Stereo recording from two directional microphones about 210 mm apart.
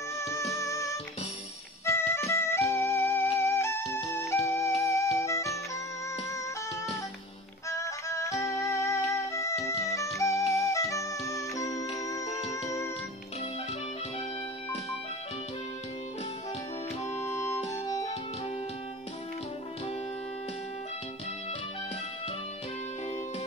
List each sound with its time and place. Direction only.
0.2 s music: 15° left (ahead or behind)
7.7 s music: 15° left (ahead or behind)
17.0 s music: 15° left (ahead or behind)